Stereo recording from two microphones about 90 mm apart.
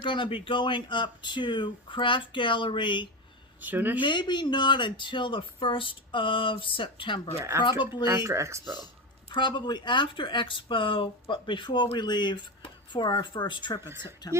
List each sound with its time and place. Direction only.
0.0 s speech: 65° left (ahead or behind)
3.6 s speech: 20° right (ahead or behind)
4.0 s speech: 55° left (ahead or behind)
7.3 s speech: 30° right (ahead or behind)
7.6 s speech: 60° left (ahead or behind)
8.0 s speech: 35° right (ahead or behind)
9.3 s speech: 60° left (ahead or behind)
14.0 s speech: 50° left (ahead or behind)